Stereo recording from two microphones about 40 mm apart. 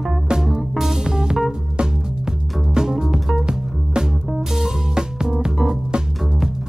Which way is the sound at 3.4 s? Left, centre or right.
Centre.